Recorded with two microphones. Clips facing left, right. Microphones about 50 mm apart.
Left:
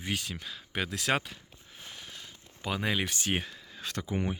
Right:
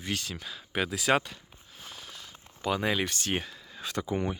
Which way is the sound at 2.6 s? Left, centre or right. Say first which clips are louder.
Right 3 dB; centre.